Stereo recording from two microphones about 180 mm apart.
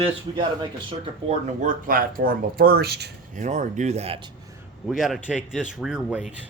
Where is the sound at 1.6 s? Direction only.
50° right (ahead or behind).